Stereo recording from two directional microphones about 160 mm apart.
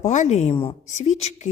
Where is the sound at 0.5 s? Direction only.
35° left (ahead or behind).